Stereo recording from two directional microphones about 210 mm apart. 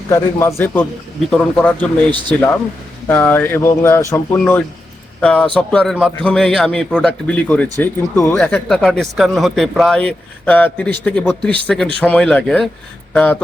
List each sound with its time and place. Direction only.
0.1 s speech: 15° left (ahead or behind)
2.0 s a man's voice: 20° right (ahead or behind)
3.1 s speech: 10° left (ahead or behind)